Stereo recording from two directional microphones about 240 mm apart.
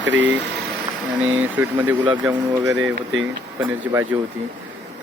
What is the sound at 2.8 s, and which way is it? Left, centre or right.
Speech, right.